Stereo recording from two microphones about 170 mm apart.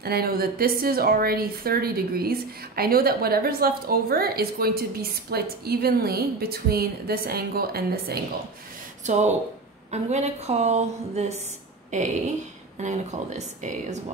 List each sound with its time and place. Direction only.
0.0 s a woman's voice: 65° right (ahead or behind)
9.0 s a woman's voice: 45° right (ahead or behind)